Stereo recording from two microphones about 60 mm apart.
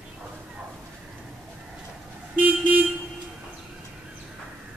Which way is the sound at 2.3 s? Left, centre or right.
Right.